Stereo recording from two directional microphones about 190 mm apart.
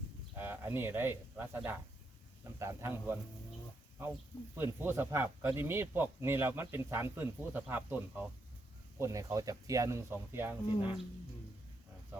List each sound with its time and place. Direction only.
0.3 s speech: 10° right (ahead or behind)
4.5 s speech: 10° right (ahead or behind)